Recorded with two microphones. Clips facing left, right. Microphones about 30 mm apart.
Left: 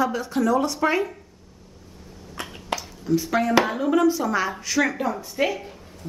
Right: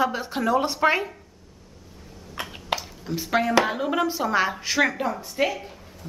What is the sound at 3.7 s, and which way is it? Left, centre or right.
Speech, centre.